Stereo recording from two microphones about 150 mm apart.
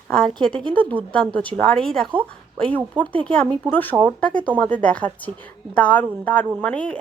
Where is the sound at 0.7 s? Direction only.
10° left (ahead or behind).